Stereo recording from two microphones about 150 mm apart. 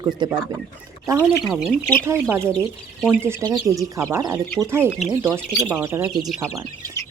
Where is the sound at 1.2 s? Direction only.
Centre (ahead or behind).